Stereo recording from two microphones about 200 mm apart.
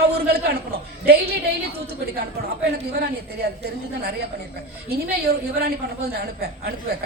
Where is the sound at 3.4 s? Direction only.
55° right (ahead or behind).